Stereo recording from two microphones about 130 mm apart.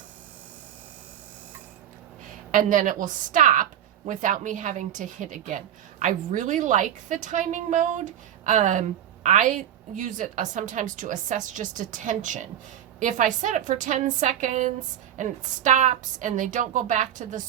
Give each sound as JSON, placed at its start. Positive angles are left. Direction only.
{"t": 2.5, "sound": "a woman's voice", "side_deg": -90}